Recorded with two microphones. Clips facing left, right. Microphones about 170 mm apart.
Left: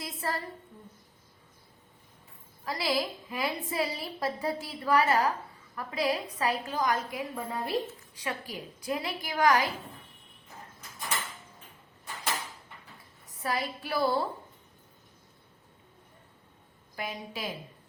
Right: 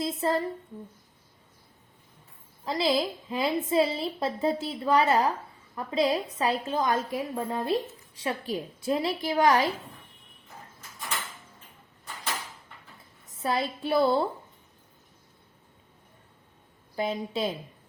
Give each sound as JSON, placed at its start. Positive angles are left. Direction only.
{"t": 0.0, "sound": "a woman's voice", "side_deg": -25}
{"t": 2.6, "sound": "a woman's voice", "side_deg": -25}
{"t": 13.4, "sound": "a woman's voice", "side_deg": -25}
{"t": 16.9, "sound": "a woman's voice", "side_deg": -25}